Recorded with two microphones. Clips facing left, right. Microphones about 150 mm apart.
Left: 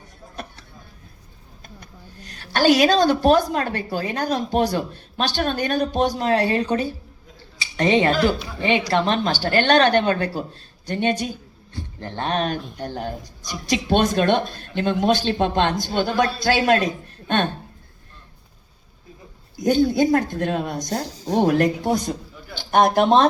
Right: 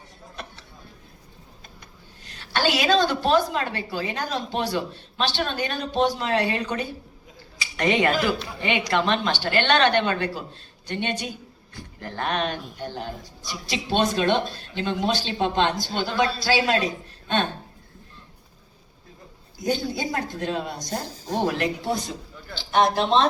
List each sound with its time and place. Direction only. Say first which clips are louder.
2.2 s a woman's voice: left 7 dB; 45° left (ahead or behind)
19.5 s a woman's voice: left 9 dB; 50° left (ahead or behind)